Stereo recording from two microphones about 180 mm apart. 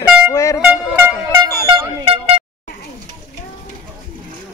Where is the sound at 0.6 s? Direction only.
10° right (ahead or behind).